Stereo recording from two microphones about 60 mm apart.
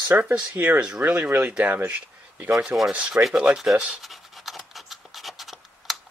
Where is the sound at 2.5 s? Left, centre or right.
Centre.